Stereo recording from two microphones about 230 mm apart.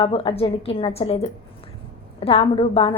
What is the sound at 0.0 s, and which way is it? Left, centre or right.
A woman's voice, left.